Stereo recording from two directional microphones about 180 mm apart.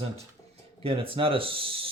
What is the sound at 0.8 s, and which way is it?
Speech, 30° right (ahead or behind).